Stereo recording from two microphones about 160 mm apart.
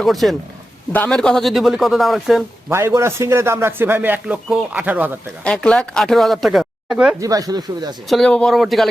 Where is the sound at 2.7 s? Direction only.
15° right (ahead or behind).